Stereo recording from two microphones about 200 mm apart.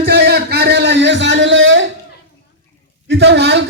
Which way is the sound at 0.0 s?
55° right (ahead or behind).